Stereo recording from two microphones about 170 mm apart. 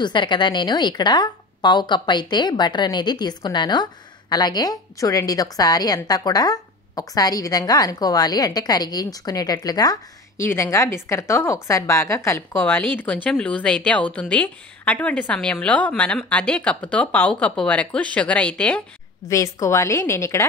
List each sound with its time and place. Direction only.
0.0 s a woman's voice: 25° left (ahead or behind); by 18.8 s 5° left (ahead or behind)
19.2 s speech: 20° left (ahead or behind)